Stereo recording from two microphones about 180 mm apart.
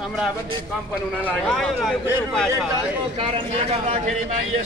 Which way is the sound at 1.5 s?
Centre (ahead or behind).